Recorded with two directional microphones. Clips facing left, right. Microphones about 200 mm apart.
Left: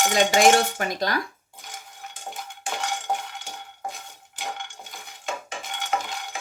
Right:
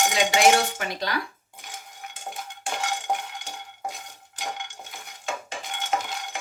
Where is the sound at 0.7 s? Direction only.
45° left (ahead or behind).